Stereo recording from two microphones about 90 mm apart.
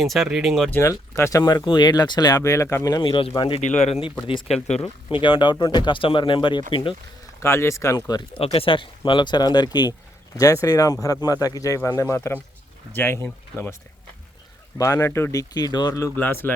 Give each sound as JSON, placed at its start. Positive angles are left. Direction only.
{"t": 0.0, "sound": "speech", "side_deg": 0}
{"t": 0.8, "sound": "speech", "side_deg": 35}
{"t": 1.6, "sound": "speech", "side_deg": 55}
{"t": 3.0, "sound": "speech", "side_deg": 70}
{"t": 4.8, "sound": "speech", "side_deg": 70}
{"t": 7.3, "sound": "speech", "side_deg": 30}
{"t": 7.9, "sound": "speech", "side_deg": 45}
{"t": 8.4, "sound": "speech", "side_deg": 85}
{"t": 10.3, "sound": "speech", "side_deg": 40}
{"t": 12.1, "sound": "speech", "side_deg": 30}
{"t": 14.8, "sound": "speech", "side_deg": 35}
{"t": 16.1, "sound": "speech", "side_deg": 20}